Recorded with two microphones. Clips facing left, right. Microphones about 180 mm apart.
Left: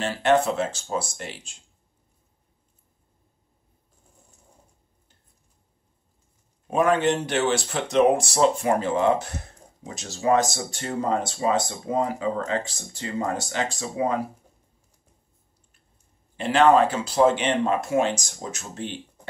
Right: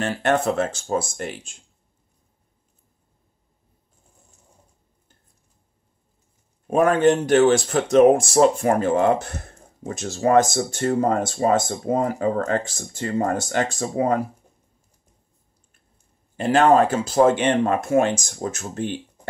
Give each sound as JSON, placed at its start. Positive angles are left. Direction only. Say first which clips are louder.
{"t": 0.0, "sound": "speech", "louder": "even", "side_deg": -50}
{"t": 6.7, "sound": "speech", "louder": "right 4 dB", "side_deg": -50}
{"t": 16.3, "sound": "speech", "louder": "right 2 dB", "side_deg": -45}